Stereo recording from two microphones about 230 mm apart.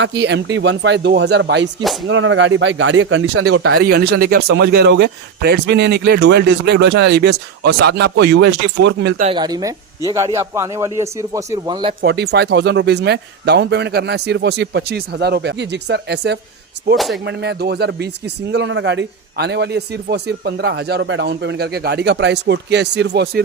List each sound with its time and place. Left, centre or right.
0.0 s speech: right
3.8 s speech: right
9.2 s a man's voice: centre
12.0 s speech: right